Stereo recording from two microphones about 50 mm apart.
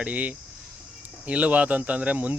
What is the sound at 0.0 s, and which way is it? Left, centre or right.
Speech, right.